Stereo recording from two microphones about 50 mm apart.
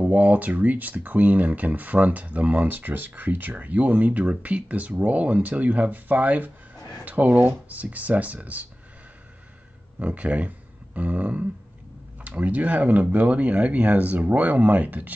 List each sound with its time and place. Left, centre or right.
0.0 s speech: right
9.9 s speech: right